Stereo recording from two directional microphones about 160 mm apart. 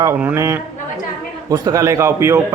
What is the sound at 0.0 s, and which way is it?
A man's voice, 10° right (ahead or behind).